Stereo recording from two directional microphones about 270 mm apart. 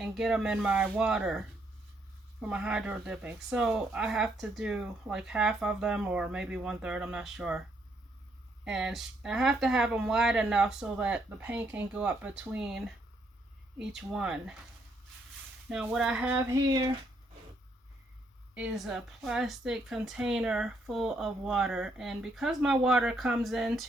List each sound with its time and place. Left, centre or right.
0.0 s a woman's voice: centre
2.5 s a woman's voice: centre
8.6 s a woman's voice: centre
15.7 s a woman's voice: centre
18.5 s a woman's voice: centre